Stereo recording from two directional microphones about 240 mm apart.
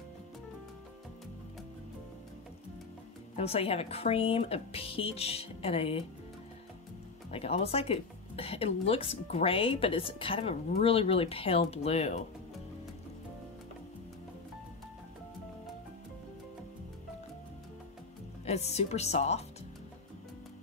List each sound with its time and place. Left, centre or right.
3.3 s speech: left
7.2 s speech: left
18.4 s speech: left